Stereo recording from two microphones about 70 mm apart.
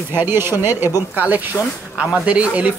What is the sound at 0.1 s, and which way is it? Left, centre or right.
Speech, right.